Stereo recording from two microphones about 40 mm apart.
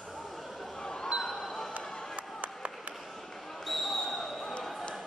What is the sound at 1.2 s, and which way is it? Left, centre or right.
Basketball bounce, centre.